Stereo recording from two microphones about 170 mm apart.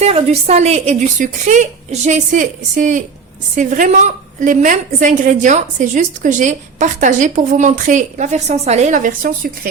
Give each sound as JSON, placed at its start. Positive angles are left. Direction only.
{"t": 0.0, "sound": "a woman's voice", "side_deg": -40}